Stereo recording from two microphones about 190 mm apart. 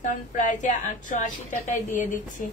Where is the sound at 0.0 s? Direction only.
40° left (ahead or behind).